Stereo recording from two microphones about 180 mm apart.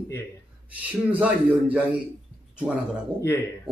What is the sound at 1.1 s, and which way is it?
Speech, 10° right (ahead or behind).